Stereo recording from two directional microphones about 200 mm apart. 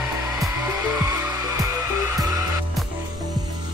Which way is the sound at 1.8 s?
15° right (ahead or behind).